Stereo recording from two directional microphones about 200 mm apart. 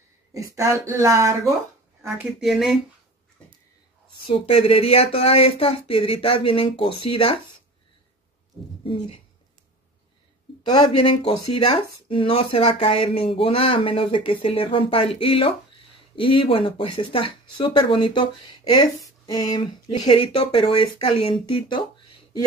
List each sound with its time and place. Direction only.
0.3 s speech: 15° right (ahead or behind)
2.0 s speech: 5° right (ahead or behind)
3.4 s a sound: 5° left (ahead or behind)
4.3 s speech: 30° left (ahead or behind)
11.6 s speech: 25° left (ahead or behind)